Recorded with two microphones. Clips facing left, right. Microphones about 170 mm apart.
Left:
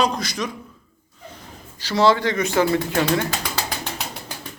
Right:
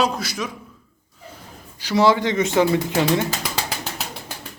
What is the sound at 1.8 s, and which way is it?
Speech, 10° right (ahead or behind).